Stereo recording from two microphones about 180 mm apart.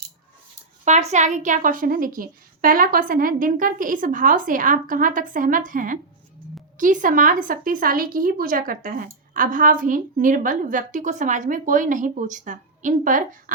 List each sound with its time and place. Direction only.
0.9 s a woman's voice: 40° right (ahead or behind)